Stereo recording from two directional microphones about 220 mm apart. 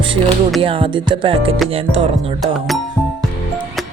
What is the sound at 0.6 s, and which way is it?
Speech, 25° right (ahead or behind).